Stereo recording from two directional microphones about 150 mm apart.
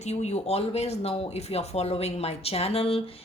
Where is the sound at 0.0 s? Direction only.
45° left (ahead or behind).